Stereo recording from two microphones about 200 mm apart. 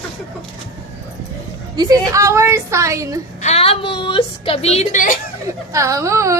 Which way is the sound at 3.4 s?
30° left (ahead or behind).